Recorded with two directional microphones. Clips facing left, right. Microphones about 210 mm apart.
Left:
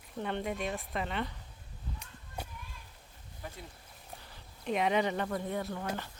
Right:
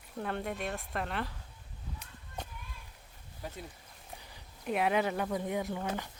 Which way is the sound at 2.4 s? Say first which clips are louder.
Even; 10° left (ahead or behind).